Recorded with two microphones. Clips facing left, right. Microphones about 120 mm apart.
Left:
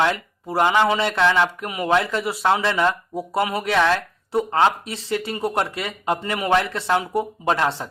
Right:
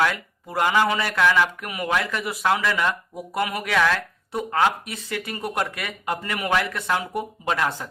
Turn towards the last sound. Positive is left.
turn(degrees=30)  # may be behind; listen again after turning